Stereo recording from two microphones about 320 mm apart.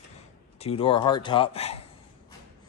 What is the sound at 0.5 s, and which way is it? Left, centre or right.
Speech, centre.